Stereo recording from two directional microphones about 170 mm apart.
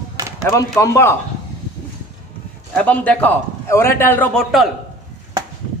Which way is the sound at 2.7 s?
10° left (ahead or behind).